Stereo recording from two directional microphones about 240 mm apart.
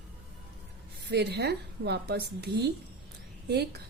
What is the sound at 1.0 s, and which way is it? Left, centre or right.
A woman's voice, right.